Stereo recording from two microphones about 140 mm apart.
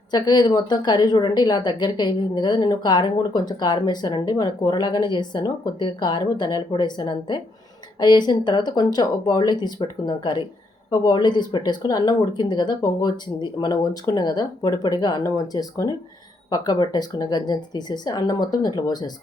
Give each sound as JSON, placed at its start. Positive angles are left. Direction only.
{"t": 0.1, "sound": "a woman's voice", "side_deg": 30}